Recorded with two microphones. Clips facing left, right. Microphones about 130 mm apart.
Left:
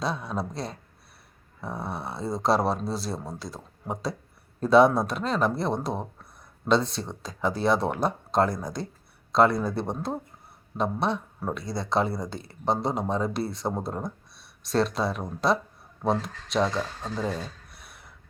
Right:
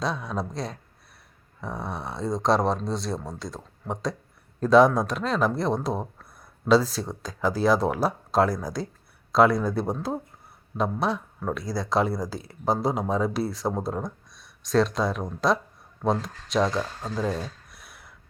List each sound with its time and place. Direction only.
0.0 s speech: centre (ahead or behind)